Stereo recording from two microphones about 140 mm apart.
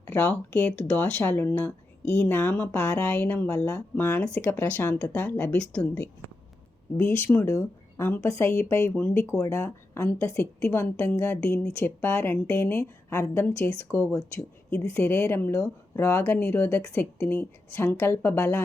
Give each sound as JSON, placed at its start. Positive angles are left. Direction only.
{"t": 0.0, "sound": "speech", "side_deg": 15}
{"t": 6.9, "sound": "a woman's voice", "side_deg": 15}